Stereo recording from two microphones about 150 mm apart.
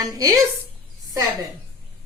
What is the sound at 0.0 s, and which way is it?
Speech, 25° right (ahead or behind).